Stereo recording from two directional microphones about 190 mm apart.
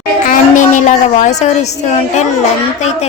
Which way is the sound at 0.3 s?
40° left (ahead or behind).